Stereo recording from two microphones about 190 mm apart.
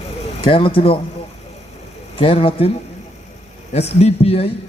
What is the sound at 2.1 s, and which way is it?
Speech, 30° left (ahead or behind).